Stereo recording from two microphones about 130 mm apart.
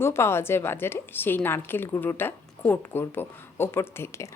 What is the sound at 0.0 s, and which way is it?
A woman's voice, 20° left (ahead or behind).